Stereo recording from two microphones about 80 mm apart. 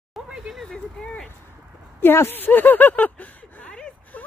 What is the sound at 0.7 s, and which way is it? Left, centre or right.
Speech, centre.